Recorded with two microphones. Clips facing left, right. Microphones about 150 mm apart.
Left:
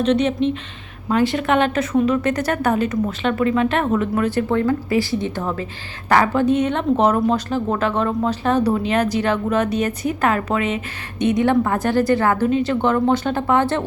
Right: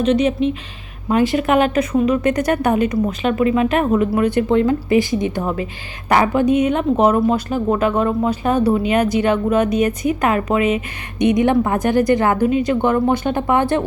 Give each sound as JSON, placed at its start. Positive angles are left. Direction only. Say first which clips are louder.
{"t": 0.0, "sound": "a woman's voice", "louder": "right 2 dB", "side_deg": -10}